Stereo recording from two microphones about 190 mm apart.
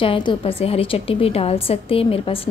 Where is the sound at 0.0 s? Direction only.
25° left (ahead or behind).